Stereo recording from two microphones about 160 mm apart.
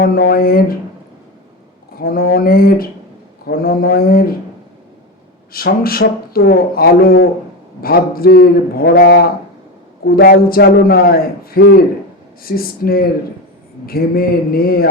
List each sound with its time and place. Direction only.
0.0 s speech: 70° left (ahead or behind)
2.0 s speech: 70° left (ahead or behind)
5.5 s speech: 70° left (ahead or behind); by 9.2 s 90° left
10.1 s speech: 70° left (ahead or behind)